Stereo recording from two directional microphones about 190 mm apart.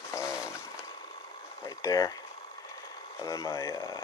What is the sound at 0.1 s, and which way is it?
Chainsaw, 15° left (ahead or behind).